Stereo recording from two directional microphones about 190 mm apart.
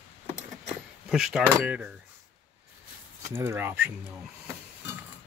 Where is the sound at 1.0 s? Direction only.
5° right (ahead or behind).